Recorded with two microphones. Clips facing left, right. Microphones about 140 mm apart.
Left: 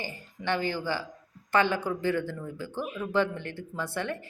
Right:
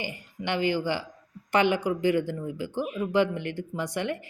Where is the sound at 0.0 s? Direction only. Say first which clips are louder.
Right 1 dB; 15° right (ahead or behind).